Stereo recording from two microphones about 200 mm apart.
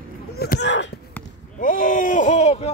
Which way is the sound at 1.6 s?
45° left (ahead or behind).